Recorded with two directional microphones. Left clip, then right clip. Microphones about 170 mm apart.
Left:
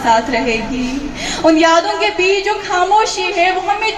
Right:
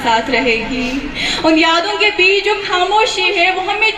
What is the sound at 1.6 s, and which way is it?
Speech, 45° left (ahead or behind).